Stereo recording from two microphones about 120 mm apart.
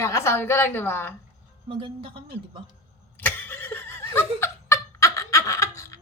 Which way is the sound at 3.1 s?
15° left (ahead or behind).